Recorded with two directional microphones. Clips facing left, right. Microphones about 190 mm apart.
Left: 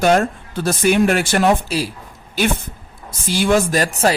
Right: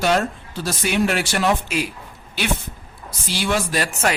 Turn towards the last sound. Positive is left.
turn(degrees=35)  # may be behind; listen again after turning